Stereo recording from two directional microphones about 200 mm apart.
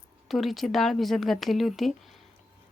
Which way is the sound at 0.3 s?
Centre (ahead or behind).